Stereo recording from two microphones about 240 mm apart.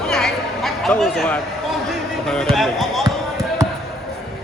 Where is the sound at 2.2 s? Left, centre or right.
Centre.